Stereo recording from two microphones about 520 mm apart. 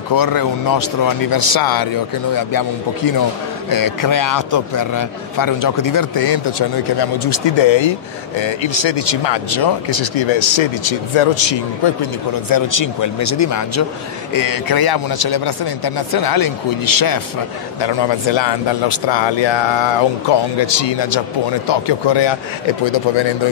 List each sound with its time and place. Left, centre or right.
0.1 s speech: left
7.0 s speech: left
12.0 s speech: left
17.7 s speech: left